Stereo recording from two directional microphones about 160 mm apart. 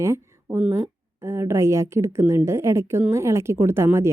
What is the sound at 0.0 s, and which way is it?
A woman's voice, 15° right (ahead or behind).